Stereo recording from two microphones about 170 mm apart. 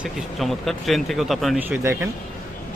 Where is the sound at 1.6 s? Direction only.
10° right (ahead or behind).